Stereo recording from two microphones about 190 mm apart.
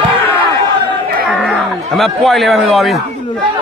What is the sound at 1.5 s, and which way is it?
A man's voice, centre (ahead or behind).